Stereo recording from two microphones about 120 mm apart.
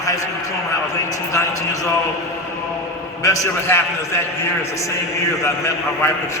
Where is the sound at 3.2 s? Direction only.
25° left (ahead or behind).